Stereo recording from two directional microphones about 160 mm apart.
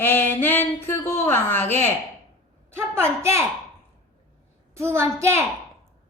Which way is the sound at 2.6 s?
15° right (ahead or behind).